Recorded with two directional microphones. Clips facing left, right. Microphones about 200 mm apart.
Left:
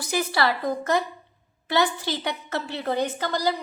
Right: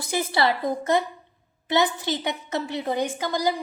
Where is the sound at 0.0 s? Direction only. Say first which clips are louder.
Right 1 dB; 25° right (ahead or behind).